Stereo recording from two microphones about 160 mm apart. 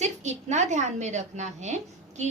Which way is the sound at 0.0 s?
45° right (ahead or behind).